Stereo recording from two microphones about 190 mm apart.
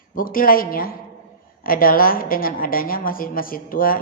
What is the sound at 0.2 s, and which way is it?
Speech, 50° left (ahead or behind).